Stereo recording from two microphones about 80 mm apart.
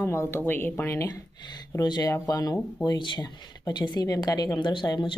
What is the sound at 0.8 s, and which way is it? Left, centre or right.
Speech, left.